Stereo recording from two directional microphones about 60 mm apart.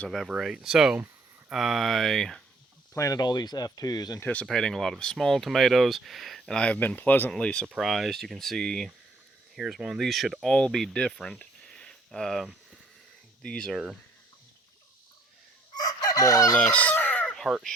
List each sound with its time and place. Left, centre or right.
0.3 s speech: centre
2.9 s speech: left
4.5 s speech: centre
6.4 s speech: centre
7.3 s speech: centre
7.7 s speech: centre
9.6 s speech: centre
10.0 s speech: centre
11.3 s a sound: centre
12.4 s a sound: centre
13.4 s speech: centre
15.8 s chicken: left
16.6 s chicken: left
17.3 s speech: centre